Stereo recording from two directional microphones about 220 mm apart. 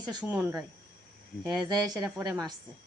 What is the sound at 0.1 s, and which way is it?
Speech, 15° right (ahead or behind).